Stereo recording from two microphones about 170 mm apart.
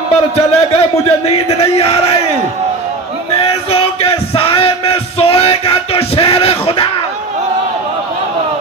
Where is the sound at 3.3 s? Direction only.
35° left (ahead or behind).